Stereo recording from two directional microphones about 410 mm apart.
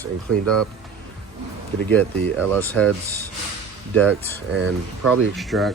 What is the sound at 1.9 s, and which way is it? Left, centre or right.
Speech, centre.